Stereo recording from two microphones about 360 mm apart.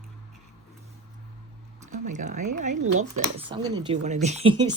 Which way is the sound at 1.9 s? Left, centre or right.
Centre.